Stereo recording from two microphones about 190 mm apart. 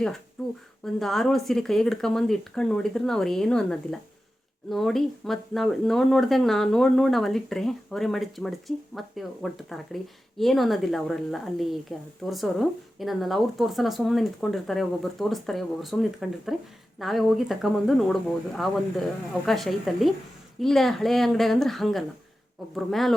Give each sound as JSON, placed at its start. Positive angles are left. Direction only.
{"t": 0.9, "sound": "speech", "side_deg": 0}